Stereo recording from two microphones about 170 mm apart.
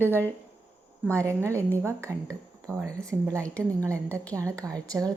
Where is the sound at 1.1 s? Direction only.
15° right (ahead or behind).